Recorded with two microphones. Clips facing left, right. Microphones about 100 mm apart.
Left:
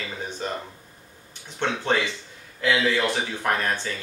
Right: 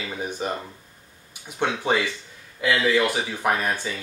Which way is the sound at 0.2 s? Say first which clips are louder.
Right 4 dB; 10° right (ahead or behind).